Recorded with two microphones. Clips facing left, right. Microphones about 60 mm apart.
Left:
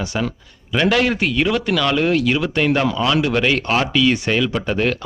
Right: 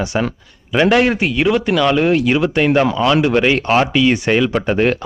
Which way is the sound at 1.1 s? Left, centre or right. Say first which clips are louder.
Right 3 dB; centre.